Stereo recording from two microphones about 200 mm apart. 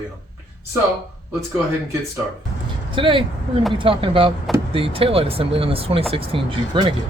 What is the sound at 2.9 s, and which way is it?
Speech, 25° right (ahead or behind).